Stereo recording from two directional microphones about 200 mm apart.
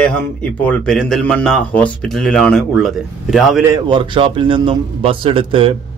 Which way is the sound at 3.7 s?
25° right (ahead or behind).